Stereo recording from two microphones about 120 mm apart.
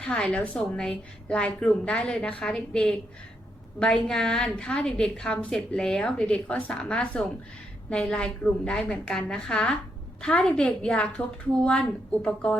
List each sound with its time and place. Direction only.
0.0 s a woman's voice: 10° left (ahead or behind)